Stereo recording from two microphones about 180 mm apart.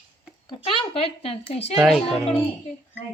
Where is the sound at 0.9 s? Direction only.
30° left (ahead or behind).